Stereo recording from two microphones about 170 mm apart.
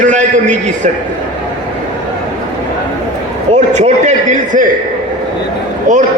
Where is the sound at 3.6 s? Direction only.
45° right (ahead or behind).